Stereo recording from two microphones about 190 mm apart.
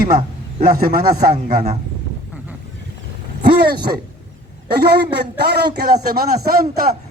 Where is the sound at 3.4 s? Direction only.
60° right (ahead or behind).